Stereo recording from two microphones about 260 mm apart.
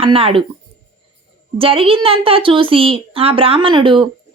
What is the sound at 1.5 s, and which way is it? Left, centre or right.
A woman's voice, right.